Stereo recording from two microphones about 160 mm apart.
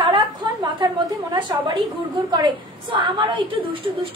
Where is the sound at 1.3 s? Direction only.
30° right (ahead or behind).